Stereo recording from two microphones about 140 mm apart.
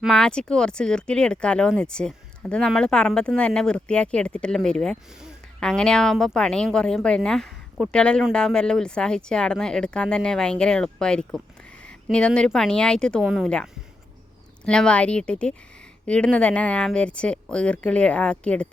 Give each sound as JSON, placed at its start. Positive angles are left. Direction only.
{"t": 0.0, "sound": "speech", "side_deg": 5}
{"t": 13.2, "sound": "speech", "side_deg": -5}
{"t": 14.6, "sound": "speech", "side_deg": 5}